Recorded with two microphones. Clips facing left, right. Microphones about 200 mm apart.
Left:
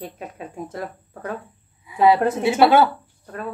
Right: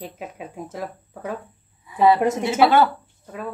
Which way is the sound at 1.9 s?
15° left (ahead or behind).